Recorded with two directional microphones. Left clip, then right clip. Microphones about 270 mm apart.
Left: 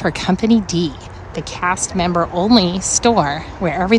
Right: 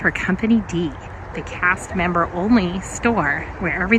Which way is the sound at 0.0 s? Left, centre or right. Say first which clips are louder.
Right 1 dB; centre.